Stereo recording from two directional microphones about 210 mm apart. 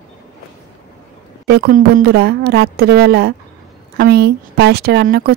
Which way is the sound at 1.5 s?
50° right (ahead or behind).